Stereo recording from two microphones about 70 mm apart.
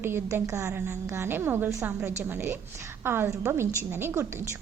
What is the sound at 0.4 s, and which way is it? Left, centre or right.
A woman's voice, right.